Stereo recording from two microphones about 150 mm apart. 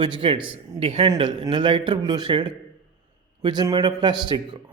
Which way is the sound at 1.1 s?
30° right (ahead or behind).